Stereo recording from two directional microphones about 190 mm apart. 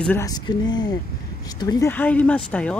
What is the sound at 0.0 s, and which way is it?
Speech, 10° left (ahead or behind).